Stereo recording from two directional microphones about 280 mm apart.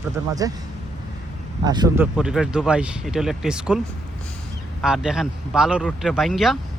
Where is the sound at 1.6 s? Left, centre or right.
Centre.